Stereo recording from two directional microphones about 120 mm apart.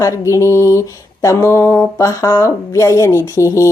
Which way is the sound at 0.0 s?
25° left (ahead or behind).